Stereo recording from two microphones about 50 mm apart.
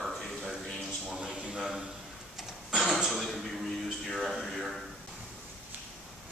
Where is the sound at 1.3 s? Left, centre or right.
Right.